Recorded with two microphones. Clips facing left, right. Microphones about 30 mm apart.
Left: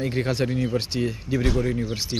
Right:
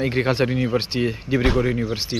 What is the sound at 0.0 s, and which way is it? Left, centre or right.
Speech, right.